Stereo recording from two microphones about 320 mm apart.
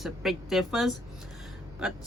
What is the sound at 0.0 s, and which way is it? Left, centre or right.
A woman's voice, centre.